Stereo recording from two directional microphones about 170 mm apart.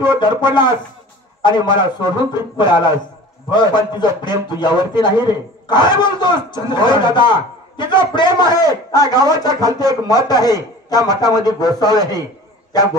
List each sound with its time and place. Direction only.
0.2 s a man's voice: 25° left (ahead or behind)